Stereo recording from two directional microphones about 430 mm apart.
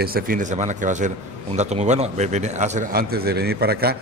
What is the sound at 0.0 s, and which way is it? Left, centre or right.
A man's voice, centre.